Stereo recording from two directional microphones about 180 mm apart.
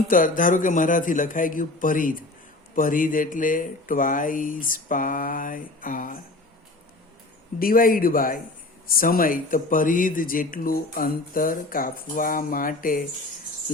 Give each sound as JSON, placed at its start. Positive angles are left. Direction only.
{"t": 0.1, "sound": "speech", "side_deg": 50}
{"t": 7.6, "sound": "speech", "side_deg": 55}